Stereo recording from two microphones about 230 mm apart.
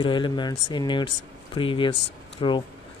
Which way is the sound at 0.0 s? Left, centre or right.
Centre.